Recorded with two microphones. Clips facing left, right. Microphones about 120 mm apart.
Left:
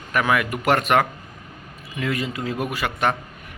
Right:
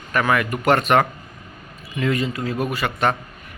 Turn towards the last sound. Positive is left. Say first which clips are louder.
# right 2 dB
turn(degrees=10)  # may be behind; listen again after turning